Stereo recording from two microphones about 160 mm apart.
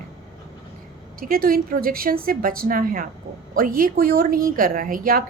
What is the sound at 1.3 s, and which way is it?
Speech, 65° right (ahead or behind).